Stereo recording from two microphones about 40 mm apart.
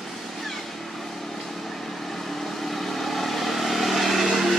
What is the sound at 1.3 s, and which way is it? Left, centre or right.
Vehicle, centre.